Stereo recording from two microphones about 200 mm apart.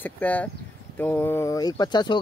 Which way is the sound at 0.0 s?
10° left (ahead or behind).